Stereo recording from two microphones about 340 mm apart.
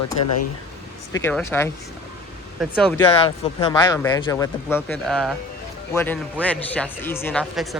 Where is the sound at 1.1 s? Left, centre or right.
Centre.